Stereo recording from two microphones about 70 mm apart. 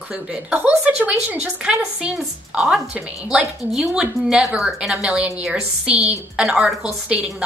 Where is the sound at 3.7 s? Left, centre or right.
Centre.